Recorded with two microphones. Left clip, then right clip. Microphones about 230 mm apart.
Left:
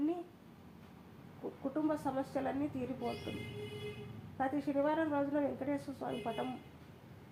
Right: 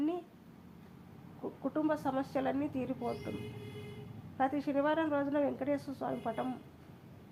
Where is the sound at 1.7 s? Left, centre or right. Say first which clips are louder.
Right 3 dB; right.